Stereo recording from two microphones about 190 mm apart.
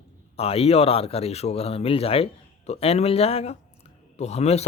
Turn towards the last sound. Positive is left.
turn(degrees=35)  # may be behind; listen again after turning